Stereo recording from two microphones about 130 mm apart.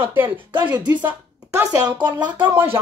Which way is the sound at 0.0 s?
15° right (ahead or behind).